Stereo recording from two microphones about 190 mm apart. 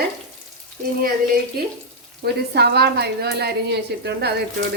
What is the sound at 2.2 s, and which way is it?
A woman's voice, 60° right (ahead or behind).